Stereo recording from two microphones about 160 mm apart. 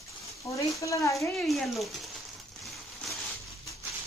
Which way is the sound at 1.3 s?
Centre (ahead or behind).